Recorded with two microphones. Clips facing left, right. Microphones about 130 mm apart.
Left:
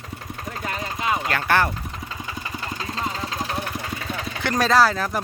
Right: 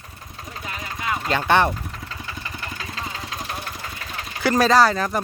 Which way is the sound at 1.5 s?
20° right (ahead or behind).